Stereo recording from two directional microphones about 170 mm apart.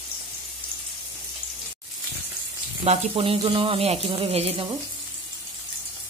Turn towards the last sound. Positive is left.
turn(degrees=-35)  # may be behind; listen again after turning